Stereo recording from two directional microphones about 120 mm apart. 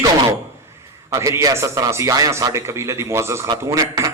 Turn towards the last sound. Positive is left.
turn(degrees=-25)  # may be behind; listen again after turning